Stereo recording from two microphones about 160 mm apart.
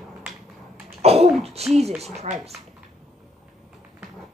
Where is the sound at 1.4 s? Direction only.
40° right (ahead or behind).